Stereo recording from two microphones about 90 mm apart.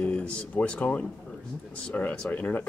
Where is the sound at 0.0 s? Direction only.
15° left (ahead or behind).